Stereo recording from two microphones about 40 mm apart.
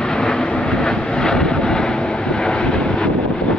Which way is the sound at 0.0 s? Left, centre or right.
Centre.